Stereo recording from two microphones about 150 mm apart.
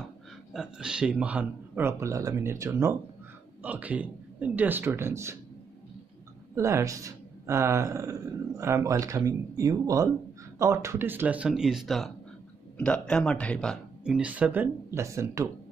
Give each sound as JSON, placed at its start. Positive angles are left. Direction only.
{"t": 0.5, "sound": "speech", "side_deg": -5}
{"t": 6.5, "sound": "speech", "side_deg": -20}
{"t": 14.0, "sound": "speech", "side_deg": -10}